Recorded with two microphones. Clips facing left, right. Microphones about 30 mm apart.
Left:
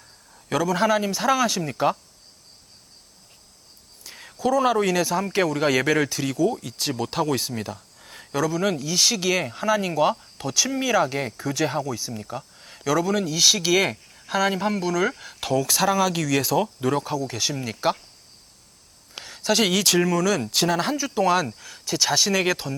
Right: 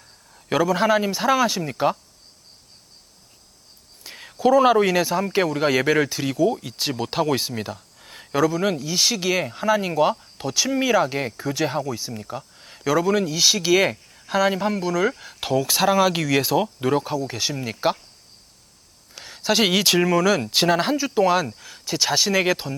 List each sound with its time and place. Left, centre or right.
0.3 s speech: centre
4.0 s speech: centre
12.2 s a sound: centre
12.8 s speech: centre
15.4 s speech: centre
19.4 s speech: centre